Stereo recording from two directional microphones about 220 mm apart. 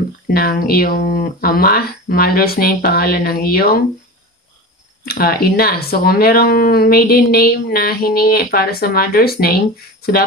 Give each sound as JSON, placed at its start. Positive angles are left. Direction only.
{"t": 0.3, "sound": "speech", "side_deg": 45}
{"t": 5.0, "sound": "speech", "side_deg": 45}